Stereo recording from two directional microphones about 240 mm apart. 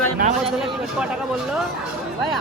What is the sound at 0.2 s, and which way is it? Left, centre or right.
Speech, right.